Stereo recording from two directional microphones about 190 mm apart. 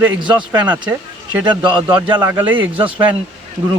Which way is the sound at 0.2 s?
25° right (ahead or behind).